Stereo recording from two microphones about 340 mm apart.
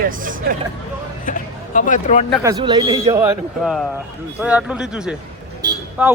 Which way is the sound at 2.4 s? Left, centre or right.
Centre.